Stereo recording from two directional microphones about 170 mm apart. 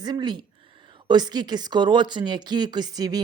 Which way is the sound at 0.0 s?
25° right (ahead or behind).